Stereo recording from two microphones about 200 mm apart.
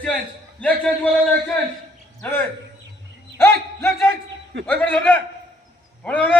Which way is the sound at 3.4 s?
10° left (ahead or behind).